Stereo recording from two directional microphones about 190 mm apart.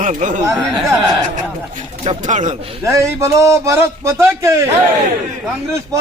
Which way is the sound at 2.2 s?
40° right (ahead or behind).